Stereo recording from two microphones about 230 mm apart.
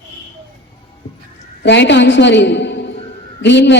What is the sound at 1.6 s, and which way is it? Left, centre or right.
A woman's voice, left.